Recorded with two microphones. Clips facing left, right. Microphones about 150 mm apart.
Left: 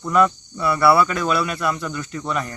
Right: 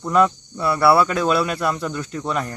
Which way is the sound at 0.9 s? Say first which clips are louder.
Right 1 dB; 30° right (ahead or behind).